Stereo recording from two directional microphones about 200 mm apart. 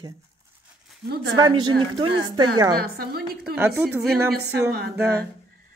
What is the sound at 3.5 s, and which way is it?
Speech, 10° right (ahead or behind).